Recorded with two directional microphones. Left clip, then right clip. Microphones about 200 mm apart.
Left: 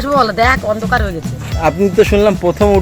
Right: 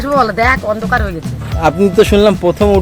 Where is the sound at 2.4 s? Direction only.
20° right (ahead or behind).